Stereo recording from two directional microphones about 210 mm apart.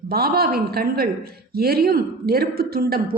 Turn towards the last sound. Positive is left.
turn(degrees=-45)  # may be behind; listen again after turning